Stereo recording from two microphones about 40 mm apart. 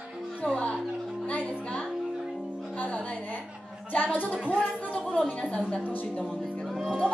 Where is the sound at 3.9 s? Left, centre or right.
Left.